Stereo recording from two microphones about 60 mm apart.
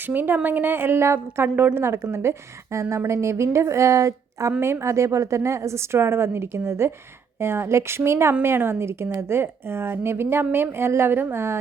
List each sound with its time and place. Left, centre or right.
0.0 s speech: right
1.5 s speech: right
4.6 s speech: right